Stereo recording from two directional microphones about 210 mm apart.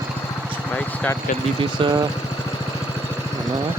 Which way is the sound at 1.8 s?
25° right (ahead or behind).